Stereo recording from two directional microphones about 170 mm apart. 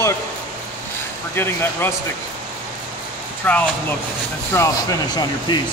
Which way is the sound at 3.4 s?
10° left (ahead or behind).